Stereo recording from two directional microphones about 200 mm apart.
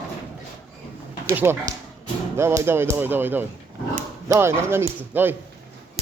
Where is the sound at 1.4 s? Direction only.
10° right (ahead or behind).